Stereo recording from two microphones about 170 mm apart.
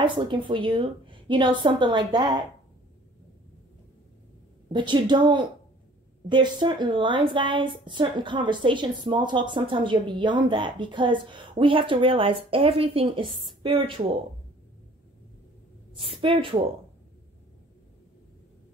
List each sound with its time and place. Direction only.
0.0 s a woman's voice: 30° right (ahead or behind)
4.7 s a woman's voice: 30° right (ahead or behind)
16.0 s a woman's voice: 35° right (ahead or behind)